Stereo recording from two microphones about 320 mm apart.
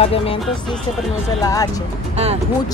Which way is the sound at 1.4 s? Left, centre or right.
Centre.